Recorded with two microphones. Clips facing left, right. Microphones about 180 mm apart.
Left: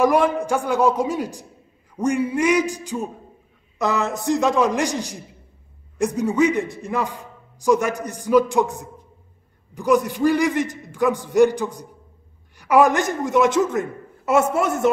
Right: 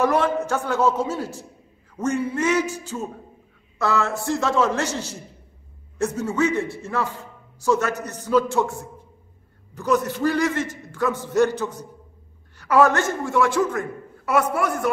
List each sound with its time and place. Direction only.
0.0 s a man's voice: 15° left (ahead or behind)